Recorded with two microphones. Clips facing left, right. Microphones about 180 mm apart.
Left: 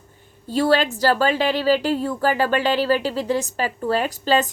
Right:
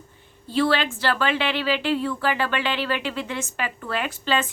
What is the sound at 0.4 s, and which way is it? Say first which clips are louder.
A woman's voice: left 3 dB; 40° left (ahead or behind).